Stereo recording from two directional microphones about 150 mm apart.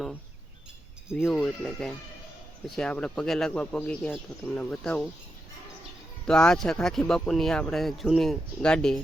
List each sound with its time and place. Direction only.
1.1 s speech: 5° left (ahead or behind)
6.2 s speech: 5° left (ahead or behind)